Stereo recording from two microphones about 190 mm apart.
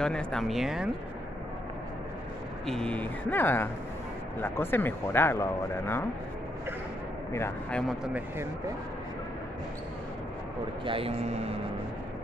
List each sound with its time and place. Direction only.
0.0 s speech: 5° left (ahead or behind)
2.6 s speech: 5° left (ahead or behind)
7.3 s speech: 15° left (ahead or behind)
8.0 s speech: 5° right (ahead or behind)
10.9 s speech: 30° right (ahead or behind)